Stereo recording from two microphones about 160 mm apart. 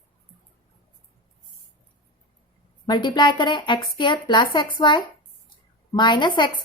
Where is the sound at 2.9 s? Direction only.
30° left (ahead or behind).